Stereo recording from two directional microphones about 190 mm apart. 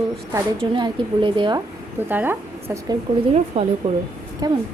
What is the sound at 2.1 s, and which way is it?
Speech, 10° right (ahead or behind).